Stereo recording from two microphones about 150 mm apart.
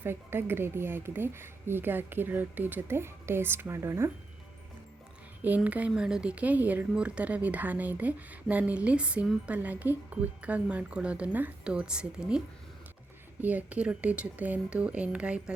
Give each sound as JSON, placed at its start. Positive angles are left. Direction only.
{"t": 0.0, "sound": "speech", "side_deg": -15}
{"t": 5.4, "sound": "speech", "side_deg": -10}
{"t": 13.4, "sound": "speech", "side_deg": -10}